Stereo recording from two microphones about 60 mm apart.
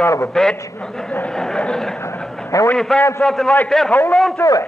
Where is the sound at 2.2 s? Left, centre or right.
Centre.